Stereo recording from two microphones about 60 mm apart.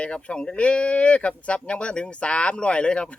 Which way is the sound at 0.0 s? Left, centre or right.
Centre.